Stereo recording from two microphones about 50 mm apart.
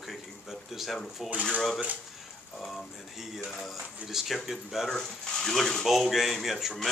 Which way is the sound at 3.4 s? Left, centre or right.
Centre.